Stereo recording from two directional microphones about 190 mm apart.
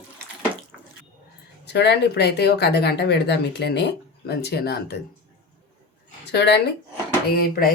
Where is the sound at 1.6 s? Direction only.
65° left (ahead or behind).